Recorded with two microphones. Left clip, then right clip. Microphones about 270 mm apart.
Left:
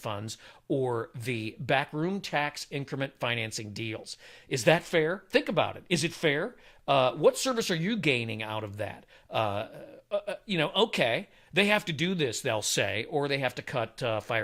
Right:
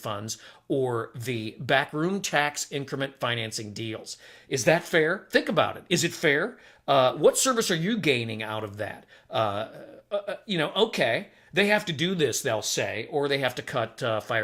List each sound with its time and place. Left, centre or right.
0.0 s speech: left
4.9 s speech: left
12.5 s speech: left
13.3 s speech: left